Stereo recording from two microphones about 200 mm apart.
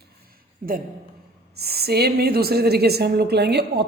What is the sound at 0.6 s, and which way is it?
Speech, 40° right (ahead or behind).